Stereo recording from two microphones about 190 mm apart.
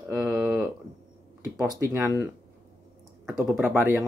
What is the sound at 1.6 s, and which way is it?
Speech, 15° right (ahead or behind).